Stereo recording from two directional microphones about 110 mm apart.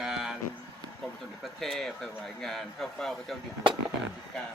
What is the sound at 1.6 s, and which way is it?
Speech, 5° left (ahead or behind).